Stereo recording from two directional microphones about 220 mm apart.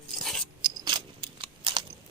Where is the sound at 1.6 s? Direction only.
25° right (ahead or behind).